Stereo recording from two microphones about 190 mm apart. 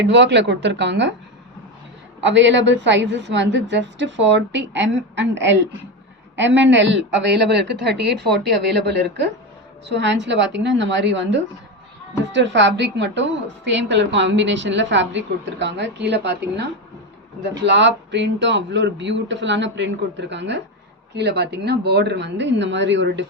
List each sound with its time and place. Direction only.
0.0 s a woman's voice: 65° right (ahead or behind)
2.2 s a woman's voice: 70° right (ahead or behind)
17.6 s a woman's voice: 70° right (ahead or behind)